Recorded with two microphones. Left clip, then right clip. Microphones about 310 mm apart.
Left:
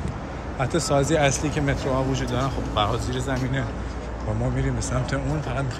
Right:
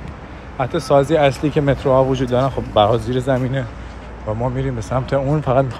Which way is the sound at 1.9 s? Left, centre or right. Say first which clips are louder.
Right 10 dB; right.